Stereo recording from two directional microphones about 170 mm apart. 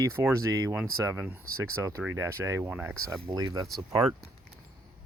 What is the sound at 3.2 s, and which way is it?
Speech, 20° right (ahead or behind).